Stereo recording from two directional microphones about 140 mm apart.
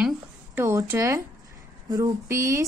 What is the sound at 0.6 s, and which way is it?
A woman's voice, 20° right (ahead or behind).